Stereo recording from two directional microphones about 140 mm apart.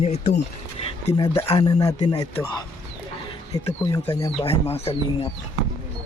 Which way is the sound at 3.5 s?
25° left (ahead or behind).